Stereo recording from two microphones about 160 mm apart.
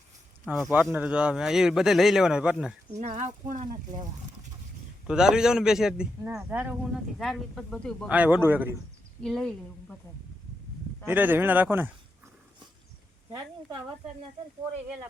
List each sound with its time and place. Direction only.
0.4 s speech: centre (ahead or behind)
0.7 s a man's voice: 10° right (ahead or behind)
3.0 s speech: 50° right (ahead or behind)
5.0 s a man's voice: 5° right (ahead or behind)
7.2 s a man's voice: centre (ahead or behind)
8.0 s speech: 10° right (ahead or behind)
9.2 s a man's voice: 5° left (ahead or behind)
11.0 s speech: 10° right (ahead or behind)